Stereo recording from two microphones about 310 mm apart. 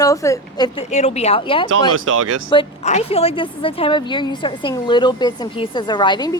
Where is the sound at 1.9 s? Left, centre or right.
Right.